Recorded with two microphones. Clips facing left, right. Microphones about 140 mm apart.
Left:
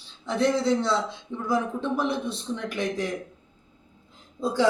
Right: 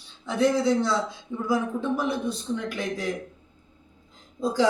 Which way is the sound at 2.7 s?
Centre (ahead or behind).